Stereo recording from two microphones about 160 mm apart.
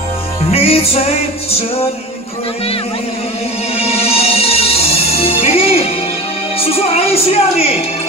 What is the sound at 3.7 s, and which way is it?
Music, 40° left (ahead or behind).